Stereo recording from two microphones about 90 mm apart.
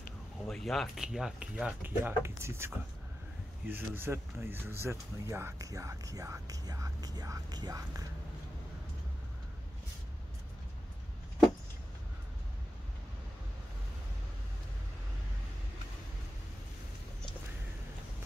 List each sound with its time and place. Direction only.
0.5 s speech: centre (ahead or behind)
1.8 s speech: 25° right (ahead or behind); by 7.8 s 45° right (ahead or behind)